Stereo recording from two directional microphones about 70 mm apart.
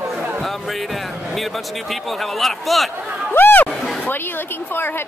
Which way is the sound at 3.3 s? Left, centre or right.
Left.